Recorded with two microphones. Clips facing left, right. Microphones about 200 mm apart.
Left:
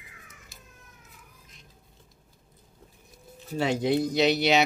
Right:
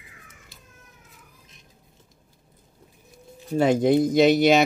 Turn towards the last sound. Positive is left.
turn(degrees=-50)  # may be behind; listen again after turning